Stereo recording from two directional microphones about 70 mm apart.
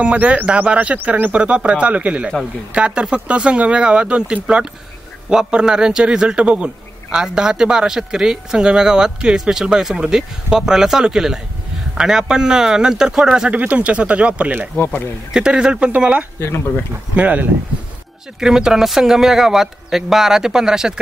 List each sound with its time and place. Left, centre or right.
0.0 s a man's voice: centre
13.5 s a man's voice: right
14.8 s speech: left
15.3 s a man's voice: centre
16.3 s speech: left
17.1 s speech: right
18.4 s a man's voice: centre